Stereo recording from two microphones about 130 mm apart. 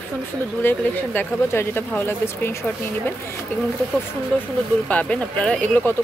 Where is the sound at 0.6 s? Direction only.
15° left (ahead or behind).